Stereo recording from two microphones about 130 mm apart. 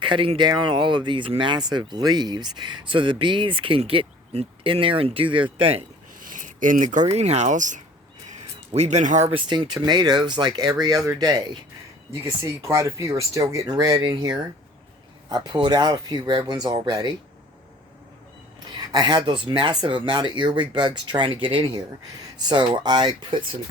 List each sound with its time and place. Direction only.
0.0 s speech: 40° right (ahead or behind)
6.1 s speech: 90° right; by 7.8 s 75° right (ahead or behind)
8.7 s speech: 60° right (ahead or behind)
9.3 s speech: 35° right (ahead or behind)
15.3 s speech: 35° right (ahead or behind)
18.9 s speech: 30° right (ahead or behind)